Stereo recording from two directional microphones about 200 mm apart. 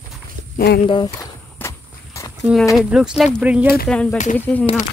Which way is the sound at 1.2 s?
15° left (ahead or behind).